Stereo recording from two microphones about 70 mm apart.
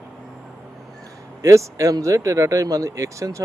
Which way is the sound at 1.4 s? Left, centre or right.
Right.